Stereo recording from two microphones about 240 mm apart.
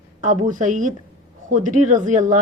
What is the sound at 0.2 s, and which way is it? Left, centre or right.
A woman's voice, right.